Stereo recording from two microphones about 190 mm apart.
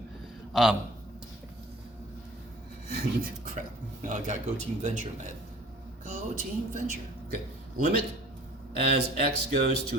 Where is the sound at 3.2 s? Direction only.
40° right (ahead or behind).